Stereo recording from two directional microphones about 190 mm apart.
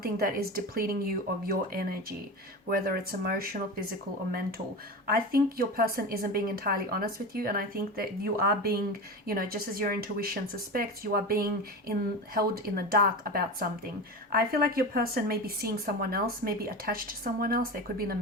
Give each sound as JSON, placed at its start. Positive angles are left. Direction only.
{"t": 0.0, "sound": "a woman's voice", "side_deg": -50}